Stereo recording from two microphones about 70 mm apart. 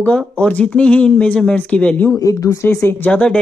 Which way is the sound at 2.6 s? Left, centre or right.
Left.